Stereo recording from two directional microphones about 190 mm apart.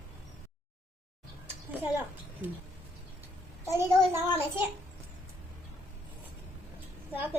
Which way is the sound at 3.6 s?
15° right (ahead or behind).